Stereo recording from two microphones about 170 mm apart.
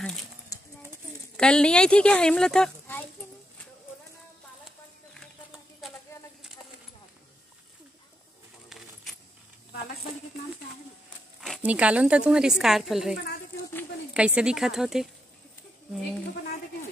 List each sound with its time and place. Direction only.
0.5 s a sound: 20° left (ahead or behind)
1.3 s speech: 5° left (ahead or behind)
8.6 s keys jangling: centre (ahead or behind)
11.6 s a woman's voice: 10° right (ahead or behind)